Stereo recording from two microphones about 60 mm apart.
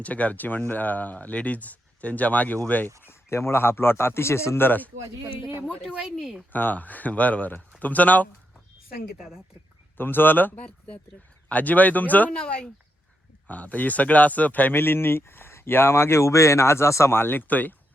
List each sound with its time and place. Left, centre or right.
0.0 s speech: left
3.0 s a man's voice: left
5.8 s speech: centre
6.5 s speech: left
9.1 s speech: centre
10.0 s speech: left
12.3 s speech: centre